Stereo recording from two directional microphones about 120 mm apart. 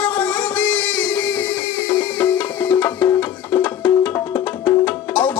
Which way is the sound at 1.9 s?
15° left (ahead or behind).